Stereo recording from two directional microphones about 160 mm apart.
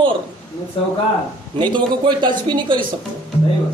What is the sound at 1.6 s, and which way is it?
A man's voice, 30° right (ahead or behind).